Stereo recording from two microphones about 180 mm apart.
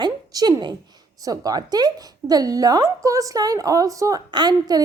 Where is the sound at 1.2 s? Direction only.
20° right (ahead or behind).